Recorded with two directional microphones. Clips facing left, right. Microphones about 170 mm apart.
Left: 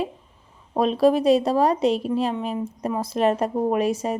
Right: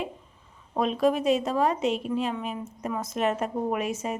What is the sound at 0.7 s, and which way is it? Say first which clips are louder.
A woman's voice: left 5 dB; 35° left (ahead or behind).